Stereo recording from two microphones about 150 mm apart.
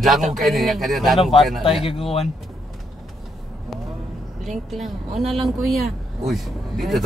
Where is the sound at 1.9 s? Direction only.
40° left (ahead or behind).